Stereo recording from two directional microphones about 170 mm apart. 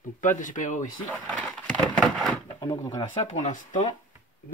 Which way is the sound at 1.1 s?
5° left (ahead or behind).